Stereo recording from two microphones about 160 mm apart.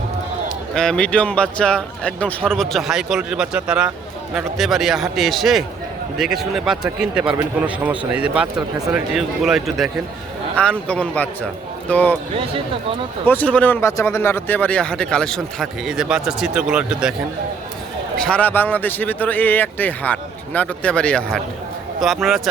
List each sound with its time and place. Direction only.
0.7 s a man's voice: 5° left (ahead or behind)
12.4 s speech: 35° right (ahead or behind)
13.2 s a man's voice: 10° left (ahead or behind); by 17.2 s 5° right (ahead or behind)
18.2 s a man's voice: 10° left (ahead or behind)